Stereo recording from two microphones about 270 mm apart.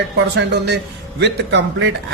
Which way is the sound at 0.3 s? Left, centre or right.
Right.